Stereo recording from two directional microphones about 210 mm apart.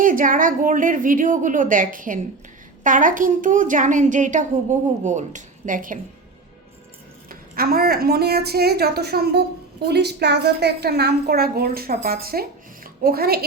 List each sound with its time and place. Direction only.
0.0 s a woman's voice: 40° right (ahead or behind)
7.3 s a woman's voice: 45° right (ahead or behind)